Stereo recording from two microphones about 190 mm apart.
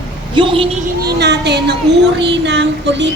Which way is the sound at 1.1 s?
60° right (ahead or behind).